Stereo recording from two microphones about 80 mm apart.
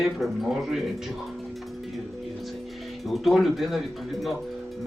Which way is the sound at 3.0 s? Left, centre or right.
Centre.